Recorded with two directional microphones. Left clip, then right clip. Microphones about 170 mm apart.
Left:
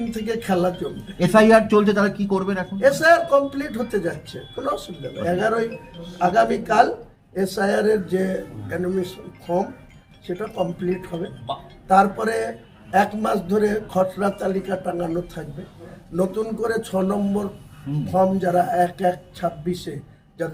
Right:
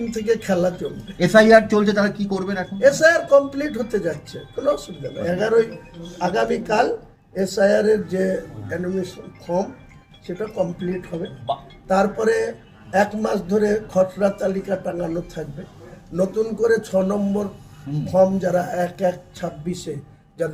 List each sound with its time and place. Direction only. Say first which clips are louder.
0.1 s a man's voice: right 4 dB; 10° left (ahead or behind)
1.2 s speech: right 2 dB; 35° left (ahead or behind)
2.8 s a man's voice: right 1 dB; 10° left (ahead or behind)